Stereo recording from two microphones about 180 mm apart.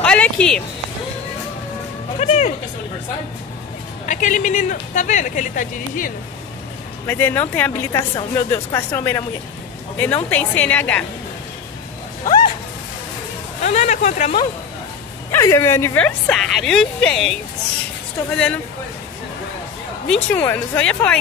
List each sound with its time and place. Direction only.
0.0 s music: 5° left (ahead or behind)
2.1 s speech: 35° left (ahead or behind)
4.0 s speech: 45° left (ahead or behind)
7.1 s a woman's voice: 10° left (ahead or behind)
13.6 s speech: 40° left (ahead or behind)
15.3 s a woman's voice: 15° left (ahead or behind)
16.3 s speech: 5° left (ahead or behind)
20.1 s a woman's voice: 10° left (ahead or behind)